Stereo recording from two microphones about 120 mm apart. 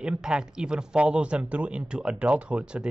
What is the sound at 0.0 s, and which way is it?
Speech, 5° right (ahead or behind).